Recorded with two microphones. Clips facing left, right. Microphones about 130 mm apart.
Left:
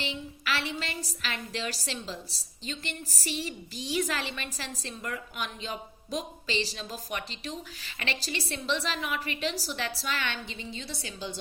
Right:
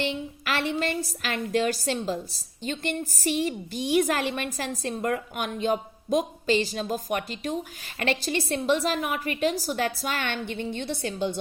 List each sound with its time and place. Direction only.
0.0 s a woman's voice: 50° right (ahead or behind)